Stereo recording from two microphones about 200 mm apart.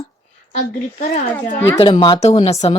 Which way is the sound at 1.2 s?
10° left (ahead or behind).